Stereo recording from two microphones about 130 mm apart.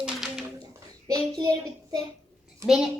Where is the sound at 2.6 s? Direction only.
5° right (ahead or behind).